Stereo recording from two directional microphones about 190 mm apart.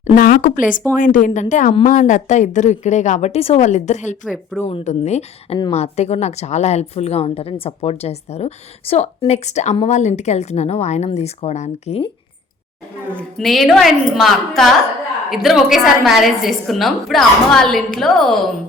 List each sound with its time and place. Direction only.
0.1 s a woman's voice: 45° left (ahead or behind)
13.1 s a woman's voice: centre (ahead or behind)